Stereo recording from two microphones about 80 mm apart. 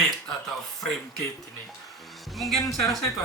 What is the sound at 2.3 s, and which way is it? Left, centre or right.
Speech, centre.